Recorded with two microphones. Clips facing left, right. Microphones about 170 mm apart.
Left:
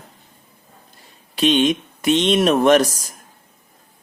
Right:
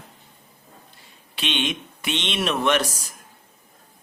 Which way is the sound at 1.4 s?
40° left (ahead or behind).